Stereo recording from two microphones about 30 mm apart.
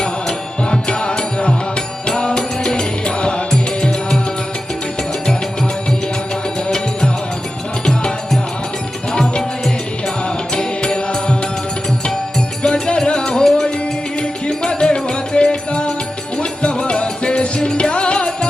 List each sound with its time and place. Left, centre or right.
0.0 s music: left
6.7 s music: left
10.2 s music: left
12.6 s music: left
14.2 s music: left